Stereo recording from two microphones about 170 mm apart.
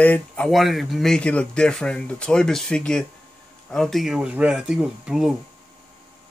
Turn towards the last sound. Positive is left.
turn(degrees=-5)  # may be behind; listen again after turning